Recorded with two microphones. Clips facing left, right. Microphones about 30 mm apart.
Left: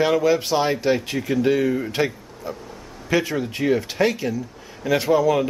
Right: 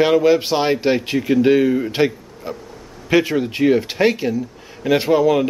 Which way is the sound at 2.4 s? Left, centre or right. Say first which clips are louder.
Right 2 dB; right.